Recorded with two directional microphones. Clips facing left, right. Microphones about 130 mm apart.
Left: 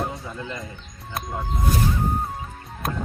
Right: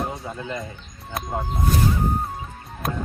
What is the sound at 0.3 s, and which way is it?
Speech, 25° right (ahead or behind).